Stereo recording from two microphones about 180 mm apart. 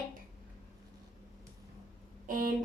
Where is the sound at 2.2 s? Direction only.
50° right (ahead or behind).